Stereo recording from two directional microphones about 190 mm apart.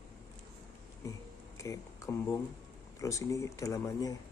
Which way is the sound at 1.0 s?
15° left (ahead or behind).